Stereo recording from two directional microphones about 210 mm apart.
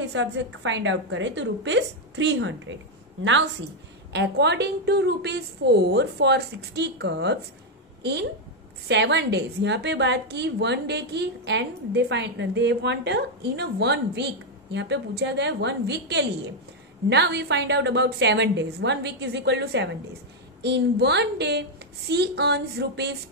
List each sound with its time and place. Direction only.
0.1 s a woman's voice: 60° right (ahead or behind)
4.1 s a woman's voice: 55° right (ahead or behind)